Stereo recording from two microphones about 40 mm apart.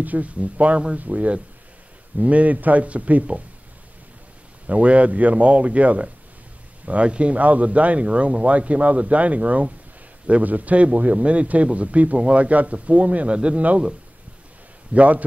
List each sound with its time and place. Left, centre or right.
0.0 s a man's voice: right
4.6 s a man's voice: right
15.0 s a man's voice: right